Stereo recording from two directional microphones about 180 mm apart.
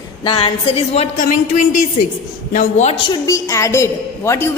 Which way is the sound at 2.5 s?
45° left (ahead or behind).